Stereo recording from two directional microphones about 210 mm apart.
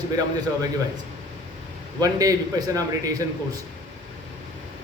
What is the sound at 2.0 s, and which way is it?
Speech, 15° right (ahead or behind).